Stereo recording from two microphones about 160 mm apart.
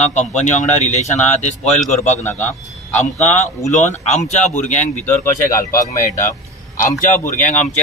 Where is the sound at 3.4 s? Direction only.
45° left (ahead or behind).